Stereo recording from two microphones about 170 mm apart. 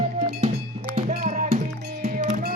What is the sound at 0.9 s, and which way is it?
Music, 45° right (ahead or behind).